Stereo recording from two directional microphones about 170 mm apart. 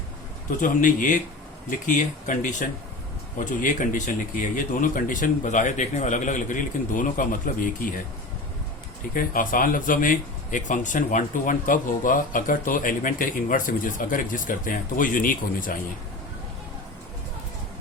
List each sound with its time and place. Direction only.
0.6 s speech: 50° left (ahead or behind)
9.1 s speech: 55° left (ahead or behind)